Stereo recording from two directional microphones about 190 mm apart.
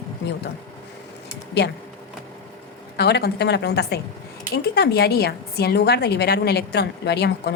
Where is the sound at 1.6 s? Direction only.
60° left (ahead or behind).